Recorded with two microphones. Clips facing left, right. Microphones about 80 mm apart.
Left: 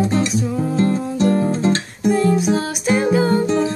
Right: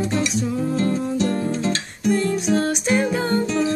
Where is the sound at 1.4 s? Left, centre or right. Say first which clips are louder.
Left 5 dB; left.